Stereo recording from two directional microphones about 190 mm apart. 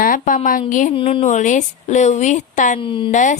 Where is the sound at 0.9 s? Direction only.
30° left (ahead or behind).